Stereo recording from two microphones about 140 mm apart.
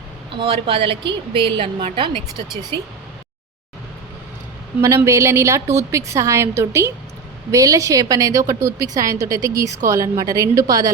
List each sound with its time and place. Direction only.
0.3 s a woman's voice: 40° right (ahead or behind)
4.8 s a woman's voice: 20° right (ahead or behind)